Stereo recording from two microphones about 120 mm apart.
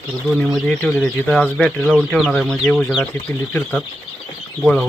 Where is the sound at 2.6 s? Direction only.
15° left (ahead or behind).